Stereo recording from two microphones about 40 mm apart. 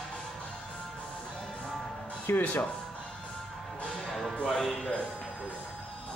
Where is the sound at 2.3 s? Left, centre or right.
Left.